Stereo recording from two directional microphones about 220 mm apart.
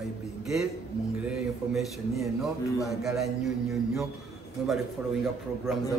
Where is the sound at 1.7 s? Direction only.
Centre (ahead or behind).